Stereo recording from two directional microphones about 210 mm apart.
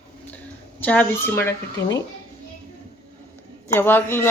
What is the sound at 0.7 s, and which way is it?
Speech, 10° left (ahead or behind).